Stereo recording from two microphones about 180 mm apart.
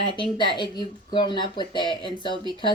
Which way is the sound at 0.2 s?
25° left (ahead or behind).